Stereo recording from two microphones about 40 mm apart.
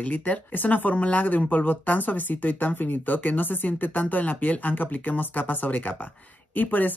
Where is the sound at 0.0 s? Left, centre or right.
Left.